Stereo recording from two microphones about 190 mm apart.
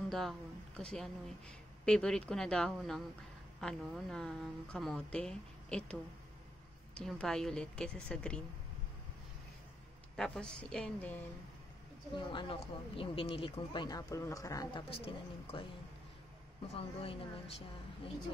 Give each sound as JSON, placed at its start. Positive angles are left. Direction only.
{"t": 0.1, "sound": "speech", "side_deg": 0}
{"t": 10.1, "sound": "speech", "side_deg": 5}
{"t": 12.2, "sound": "speech", "side_deg": 25}
{"t": 16.6, "sound": "speech", "side_deg": 30}